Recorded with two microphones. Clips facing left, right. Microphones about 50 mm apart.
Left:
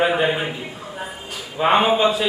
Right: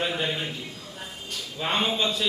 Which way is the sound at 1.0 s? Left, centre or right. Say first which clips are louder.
Left 5 dB; left.